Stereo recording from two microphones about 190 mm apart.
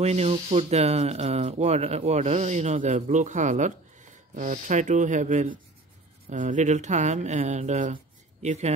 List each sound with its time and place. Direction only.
0.0 s speech: 35° right (ahead or behind)